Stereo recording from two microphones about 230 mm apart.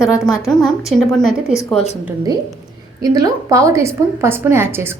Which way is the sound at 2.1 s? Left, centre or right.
Centre.